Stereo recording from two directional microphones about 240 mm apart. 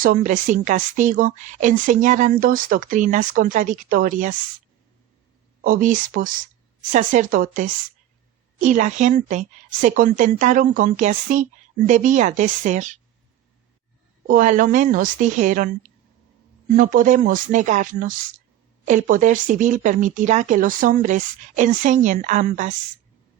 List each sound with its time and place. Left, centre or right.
0.0 s a woman's voice: right
5.6 s a woman's voice: right
14.3 s a woman's voice: right
16.7 s a woman's voice: right